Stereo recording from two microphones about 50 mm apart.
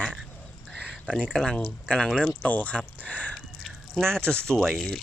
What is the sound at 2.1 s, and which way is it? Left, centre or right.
Speech, left.